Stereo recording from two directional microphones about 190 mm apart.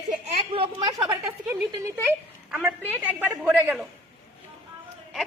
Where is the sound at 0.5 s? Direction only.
30° right (ahead or behind).